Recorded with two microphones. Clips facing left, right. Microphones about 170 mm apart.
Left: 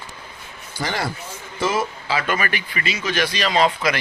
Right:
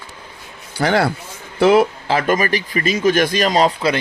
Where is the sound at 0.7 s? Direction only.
65° right (ahead or behind).